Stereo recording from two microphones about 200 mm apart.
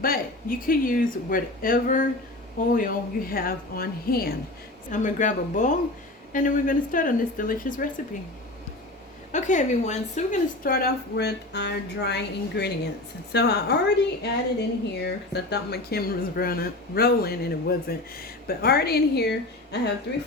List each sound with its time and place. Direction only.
0.0 s speech: 45° left (ahead or behind)
9.3 s a woman's voice: 35° left (ahead or behind); by 20.2 s 55° left (ahead or behind)